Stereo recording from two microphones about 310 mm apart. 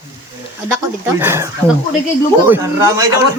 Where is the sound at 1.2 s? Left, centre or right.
Centre.